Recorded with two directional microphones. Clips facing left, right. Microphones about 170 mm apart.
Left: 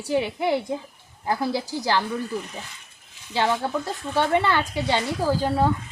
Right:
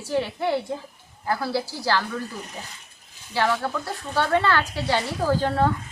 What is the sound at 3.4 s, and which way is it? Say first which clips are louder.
A woman's voice: left 1 dB; 20° left (ahead or behind).